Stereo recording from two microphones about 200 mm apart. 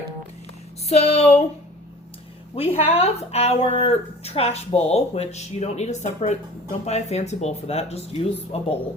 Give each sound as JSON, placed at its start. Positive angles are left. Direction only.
{"t": 0.9, "sound": "speech", "side_deg": 35}
{"t": 2.6, "sound": "a woman's voice", "side_deg": 30}